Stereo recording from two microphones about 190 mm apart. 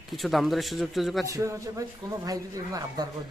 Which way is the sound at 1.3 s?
15° right (ahead or behind).